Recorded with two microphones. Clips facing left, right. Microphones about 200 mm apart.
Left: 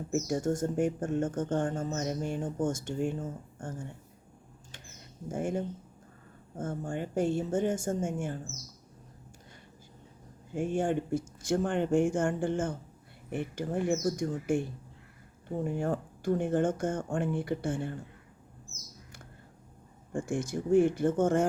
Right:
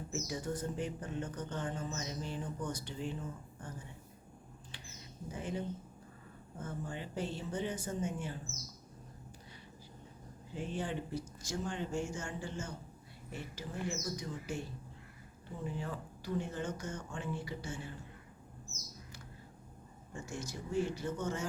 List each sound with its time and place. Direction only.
0.1 s speech: 50° left (ahead or behind)
4.7 s a sound: 50° left (ahead or behind)
6.6 s speech: 50° left (ahead or behind)
10.5 s speech: 50° left (ahead or behind)
20.1 s speech: 50° left (ahead or behind)